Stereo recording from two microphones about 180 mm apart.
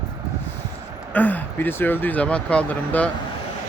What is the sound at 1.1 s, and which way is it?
Speech, 10° left (ahead or behind).